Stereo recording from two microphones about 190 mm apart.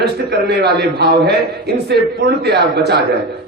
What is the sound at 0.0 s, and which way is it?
A man's voice, 60° right (ahead or behind).